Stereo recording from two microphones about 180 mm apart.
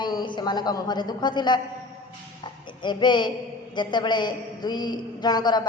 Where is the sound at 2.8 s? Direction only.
25° left (ahead or behind).